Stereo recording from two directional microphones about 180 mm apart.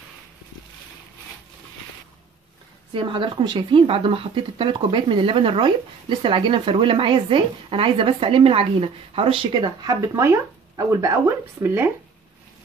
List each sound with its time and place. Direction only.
2.9 s speech: 25° right (ahead or behind); by 11.9 s 10° right (ahead or behind)